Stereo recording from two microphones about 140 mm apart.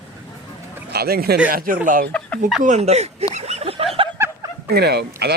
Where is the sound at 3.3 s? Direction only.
50° right (ahead or behind).